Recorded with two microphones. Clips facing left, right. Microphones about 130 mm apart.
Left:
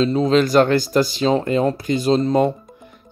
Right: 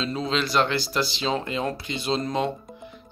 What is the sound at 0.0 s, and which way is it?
Speech, 40° left (ahead or behind).